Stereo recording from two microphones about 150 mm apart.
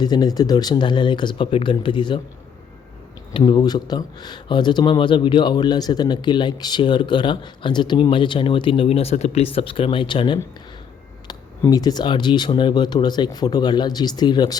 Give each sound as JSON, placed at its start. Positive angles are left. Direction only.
{"t": 0.0, "sound": "speech", "side_deg": 25}
{"t": 3.3, "sound": "speech", "side_deg": 30}
{"t": 11.6, "sound": "speech", "side_deg": 25}